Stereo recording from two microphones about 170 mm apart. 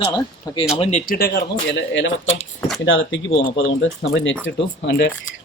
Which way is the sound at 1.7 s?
90° left.